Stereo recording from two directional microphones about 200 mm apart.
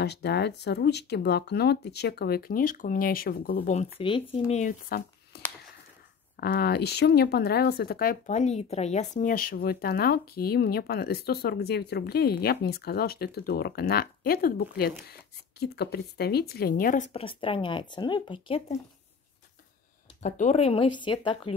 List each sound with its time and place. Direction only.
0.0 s speech: 55° left (ahead or behind); by 3.9 s 35° left (ahead or behind)
4.0 s speech: 25° left (ahead or behind)
4.5 s speech: 40° left (ahead or behind)
20.2 s speech: 35° left (ahead or behind)